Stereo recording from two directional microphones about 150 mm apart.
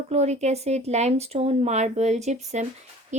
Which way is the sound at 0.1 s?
45° right (ahead or behind).